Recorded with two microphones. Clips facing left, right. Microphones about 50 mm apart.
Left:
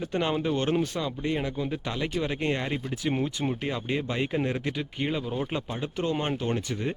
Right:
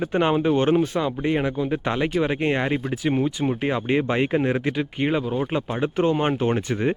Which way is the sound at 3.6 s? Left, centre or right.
Right.